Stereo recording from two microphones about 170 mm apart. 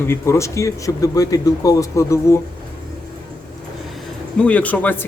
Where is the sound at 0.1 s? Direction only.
15° left (ahead or behind).